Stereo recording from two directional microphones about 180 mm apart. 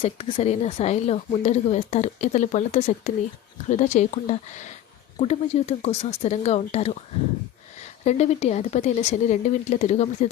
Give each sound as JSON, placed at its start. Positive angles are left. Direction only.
{"t": 0.0, "sound": "speech", "side_deg": 35}
{"t": 8.0, "sound": "speech", "side_deg": 35}